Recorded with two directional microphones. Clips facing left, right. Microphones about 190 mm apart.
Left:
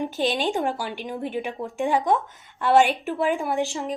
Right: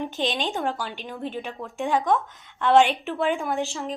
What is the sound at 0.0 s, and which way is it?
A woman's voice, 10° left (ahead or behind).